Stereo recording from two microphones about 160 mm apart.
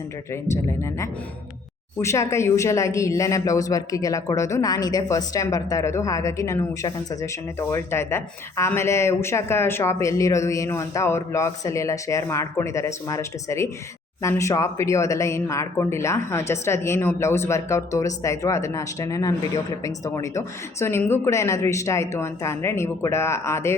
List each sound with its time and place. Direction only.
0.5 s speech: 15° left (ahead or behind)